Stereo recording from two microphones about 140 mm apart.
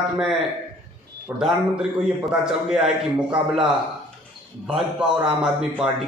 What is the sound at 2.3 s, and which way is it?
A man's voice, 5° right (ahead or behind).